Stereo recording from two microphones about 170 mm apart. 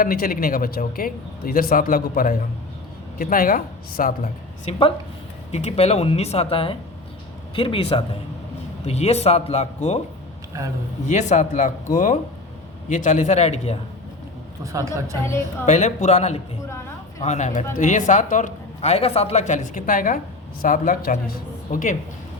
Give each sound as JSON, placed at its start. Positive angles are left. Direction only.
{"t": 0.0, "sound": "speech", "side_deg": 60}
{"t": 4.7, "sound": "speech", "side_deg": 35}
{"t": 11.0, "sound": "speech", "side_deg": 45}
{"t": 14.6, "sound": "speech", "side_deg": -20}
{"t": 15.6, "sound": "speech", "side_deg": 40}
{"t": 16.6, "sound": "a sound", "side_deg": 15}
{"t": 17.2, "sound": "speech", "side_deg": 45}